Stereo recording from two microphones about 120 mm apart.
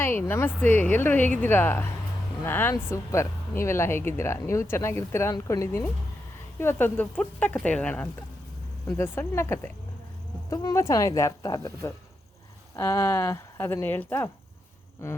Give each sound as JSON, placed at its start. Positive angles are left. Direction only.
{"t": 0.0, "sound": "speech", "side_deg": 20}
{"t": 10.5, "sound": "speech", "side_deg": 30}